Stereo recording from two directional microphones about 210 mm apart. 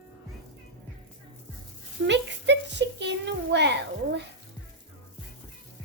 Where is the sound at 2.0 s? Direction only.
55° right (ahead or behind).